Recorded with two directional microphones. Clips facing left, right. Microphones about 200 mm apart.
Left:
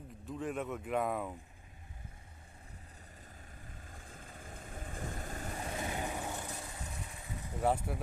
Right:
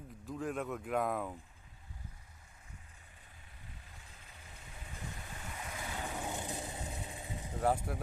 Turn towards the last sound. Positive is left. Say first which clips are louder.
# even
turn(degrees=5)  # may be behind; listen again after turning